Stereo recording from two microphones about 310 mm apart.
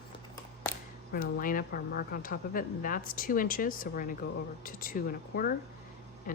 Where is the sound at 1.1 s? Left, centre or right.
Left.